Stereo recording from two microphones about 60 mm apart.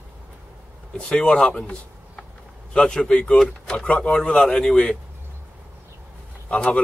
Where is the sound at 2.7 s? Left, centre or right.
Centre.